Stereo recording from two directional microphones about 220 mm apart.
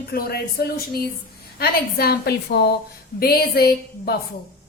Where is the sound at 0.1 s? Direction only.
45° left (ahead or behind).